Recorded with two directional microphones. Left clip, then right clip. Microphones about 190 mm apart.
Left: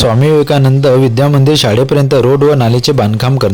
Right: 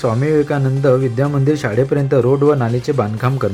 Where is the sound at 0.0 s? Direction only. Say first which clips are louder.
Left 6 dB; 25° left (ahead or behind).